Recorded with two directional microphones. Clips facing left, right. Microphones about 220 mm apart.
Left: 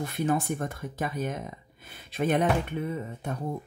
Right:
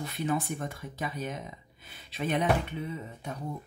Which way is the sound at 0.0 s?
50° left (ahead or behind).